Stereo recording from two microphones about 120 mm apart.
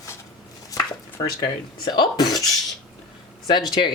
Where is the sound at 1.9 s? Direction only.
35° left (ahead or behind).